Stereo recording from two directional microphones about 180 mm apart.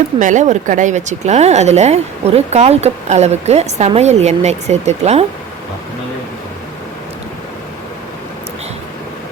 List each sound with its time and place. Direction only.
0.2 s speech: 45° right (ahead or behind)